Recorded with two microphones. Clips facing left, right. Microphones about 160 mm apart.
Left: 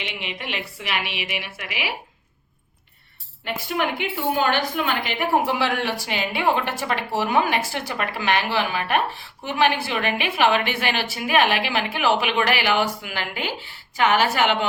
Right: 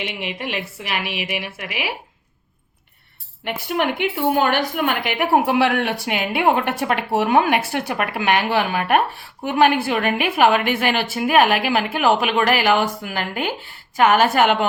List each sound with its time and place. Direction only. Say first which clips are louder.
0.2 s a woman's voice: right 4 dB; 45° right (ahead or behind)
3.4 s a woman's voice: right 3 dB; 60° right (ahead or behind)